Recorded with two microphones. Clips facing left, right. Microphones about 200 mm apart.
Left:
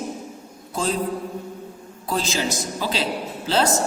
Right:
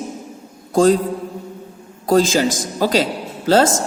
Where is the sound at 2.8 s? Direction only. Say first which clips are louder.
Right 11 dB; 45° right (ahead or behind).